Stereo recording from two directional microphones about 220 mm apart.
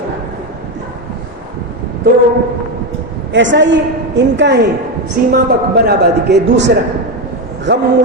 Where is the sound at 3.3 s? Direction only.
55° right (ahead or behind).